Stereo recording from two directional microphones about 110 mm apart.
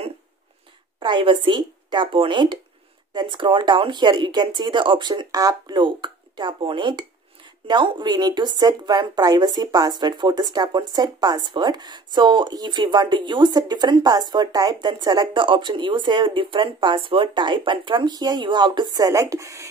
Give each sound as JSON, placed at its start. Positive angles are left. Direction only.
{"t": 0.9, "sound": "speech", "side_deg": -45}